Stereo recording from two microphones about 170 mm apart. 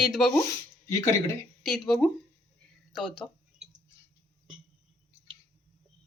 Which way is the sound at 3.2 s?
10° left (ahead or behind).